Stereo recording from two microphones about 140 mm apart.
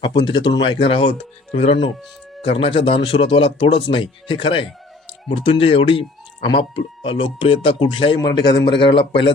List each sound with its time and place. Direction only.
0.0 s speech: 30° left (ahead or behind)